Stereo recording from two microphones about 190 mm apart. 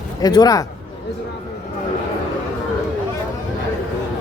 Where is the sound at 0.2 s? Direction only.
20° left (ahead or behind).